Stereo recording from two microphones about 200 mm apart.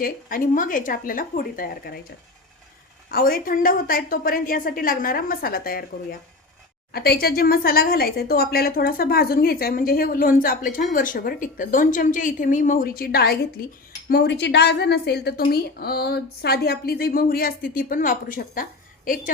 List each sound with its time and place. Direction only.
0.0 s a woman's voice: 45° left (ahead or behind)
3.1 s a woman's voice: 50° left (ahead or behind)